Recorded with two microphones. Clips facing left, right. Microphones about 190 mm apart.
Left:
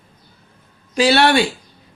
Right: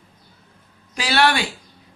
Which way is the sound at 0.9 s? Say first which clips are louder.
Left 6 dB; 25° left (ahead or behind).